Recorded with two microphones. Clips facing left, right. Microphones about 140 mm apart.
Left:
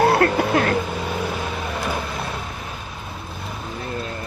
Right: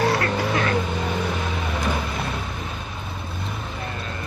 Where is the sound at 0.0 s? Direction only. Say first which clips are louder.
Left 5 dB; 60° left (ahead or behind).